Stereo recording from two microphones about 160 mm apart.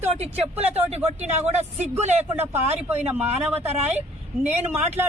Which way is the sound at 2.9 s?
10° right (ahead or behind).